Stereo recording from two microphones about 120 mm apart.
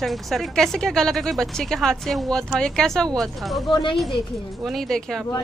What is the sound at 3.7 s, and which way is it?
Speech, 40° left (ahead or behind).